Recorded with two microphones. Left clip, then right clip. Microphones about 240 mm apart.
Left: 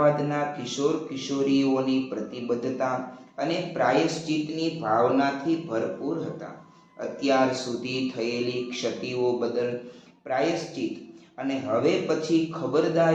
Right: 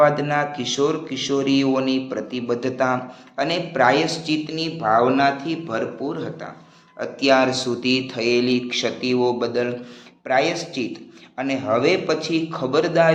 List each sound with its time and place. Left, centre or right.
0.0 s speech: right
7.2 s speech: right